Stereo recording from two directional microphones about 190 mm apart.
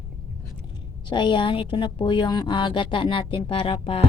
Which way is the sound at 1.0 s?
25° left (ahead or behind).